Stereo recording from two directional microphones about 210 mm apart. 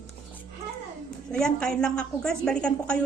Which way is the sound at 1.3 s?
5° left (ahead or behind).